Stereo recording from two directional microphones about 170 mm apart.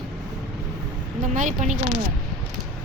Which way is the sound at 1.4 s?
45° right (ahead or behind).